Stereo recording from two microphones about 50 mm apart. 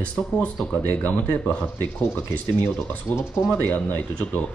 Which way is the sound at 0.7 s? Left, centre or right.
Left.